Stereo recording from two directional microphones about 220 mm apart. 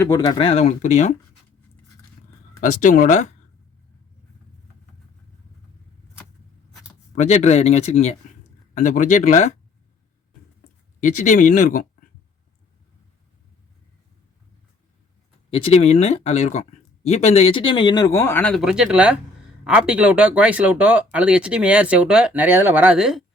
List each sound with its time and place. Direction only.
0.0 s speech: 20° left (ahead or behind)
2.6 s speech: 35° left (ahead or behind)
7.2 s speech: 30° left (ahead or behind)
11.0 s speech: 35° left (ahead or behind)
15.4 s speech: 25° left (ahead or behind); by 23.2 s 5° right (ahead or behind)